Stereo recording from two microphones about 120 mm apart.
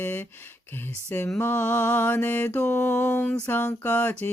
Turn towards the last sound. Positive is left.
turn(degrees=15)  # may be behind; listen again after turning